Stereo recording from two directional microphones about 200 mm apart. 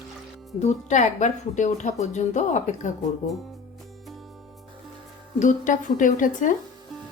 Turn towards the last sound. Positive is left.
turn(degrees=40)  # may be behind; listen again after turning